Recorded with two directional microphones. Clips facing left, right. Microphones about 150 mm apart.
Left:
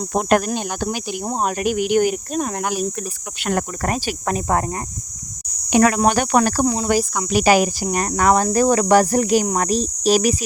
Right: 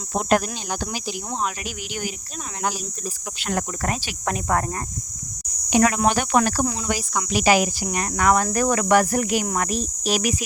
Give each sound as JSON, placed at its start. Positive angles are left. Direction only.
{"t": 0.1, "sound": "speech", "side_deg": 55}
{"t": 5.7, "sound": "speech", "side_deg": 50}